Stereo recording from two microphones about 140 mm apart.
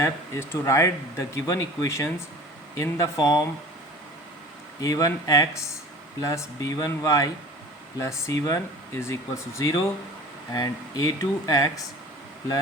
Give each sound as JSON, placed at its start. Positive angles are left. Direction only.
{"t": 0.0, "sound": "speech", "side_deg": 20}
{"t": 4.8, "sound": "speech", "side_deg": 25}